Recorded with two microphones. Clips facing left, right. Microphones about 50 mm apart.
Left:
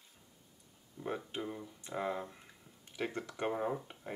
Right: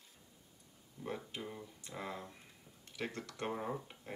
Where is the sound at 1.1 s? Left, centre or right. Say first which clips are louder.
Left 4 dB; left.